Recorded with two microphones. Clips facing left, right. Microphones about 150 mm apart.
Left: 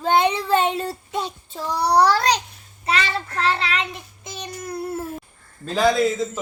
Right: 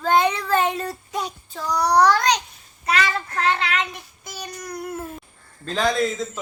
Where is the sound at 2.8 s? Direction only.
30° left (ahead or behind).